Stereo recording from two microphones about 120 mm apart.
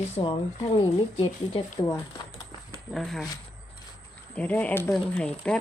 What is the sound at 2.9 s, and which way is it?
Speech, centre (ahead or behind).